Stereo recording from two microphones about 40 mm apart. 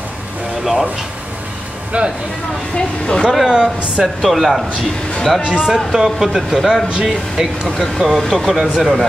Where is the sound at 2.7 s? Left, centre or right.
Left.